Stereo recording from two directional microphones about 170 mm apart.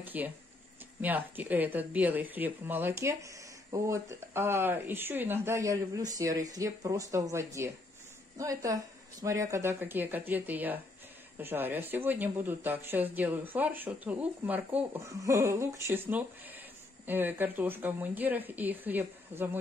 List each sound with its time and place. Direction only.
0.0 s a woman's voice: 10° right (ahead or behind)